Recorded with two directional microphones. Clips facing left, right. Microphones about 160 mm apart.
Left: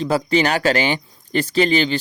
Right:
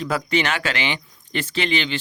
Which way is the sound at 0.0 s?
30° left (ahead or behind).